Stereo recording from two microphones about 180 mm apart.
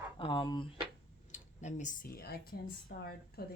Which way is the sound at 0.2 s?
25° left (ahead or behind).